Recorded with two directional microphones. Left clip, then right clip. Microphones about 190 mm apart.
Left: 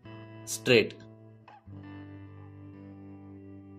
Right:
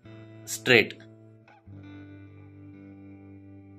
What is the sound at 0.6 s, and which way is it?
Speech, 20° left (ahead or behind).